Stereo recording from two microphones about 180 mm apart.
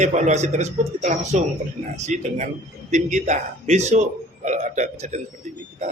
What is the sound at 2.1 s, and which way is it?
A man's voice, 40° right (ahead or behind).